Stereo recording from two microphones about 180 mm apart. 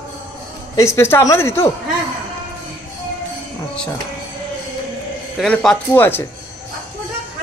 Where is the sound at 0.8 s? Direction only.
15° left (ahead or behind).